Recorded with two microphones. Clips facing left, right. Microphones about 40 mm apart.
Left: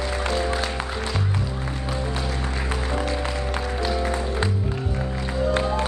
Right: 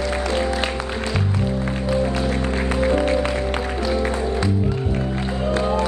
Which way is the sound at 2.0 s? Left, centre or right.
Right.